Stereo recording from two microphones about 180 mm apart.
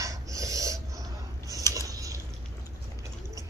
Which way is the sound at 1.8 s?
20° right (ahead or behind).